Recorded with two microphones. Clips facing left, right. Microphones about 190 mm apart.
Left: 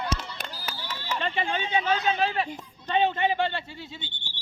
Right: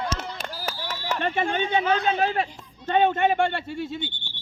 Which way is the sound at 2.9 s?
50° right (ahead or behind).